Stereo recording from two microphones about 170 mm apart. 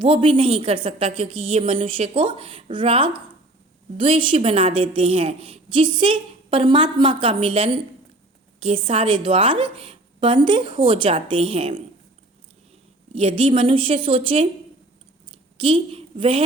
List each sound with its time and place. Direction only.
0.0 s a woman's voice: 30° right (ahead or behind)
13.1 s a woman's voice: 35° right (ahead or behind)
15.5 s a woman's voice: 30° right (ahead or behind)